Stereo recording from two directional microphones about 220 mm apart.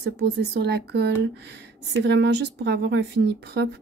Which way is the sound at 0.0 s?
50° right (ahead or behind).